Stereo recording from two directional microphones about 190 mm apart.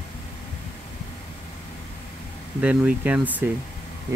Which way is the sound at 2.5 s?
5° right (ahead or behind).